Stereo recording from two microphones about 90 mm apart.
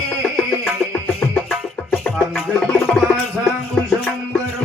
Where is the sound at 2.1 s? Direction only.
Centre (ahead or behind).